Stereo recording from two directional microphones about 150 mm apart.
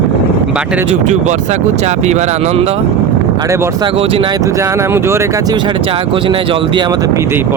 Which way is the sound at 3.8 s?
40° right (ahead or behind).